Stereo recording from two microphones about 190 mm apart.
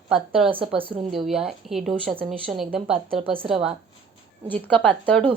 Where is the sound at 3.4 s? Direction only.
30° right (ahead or behind).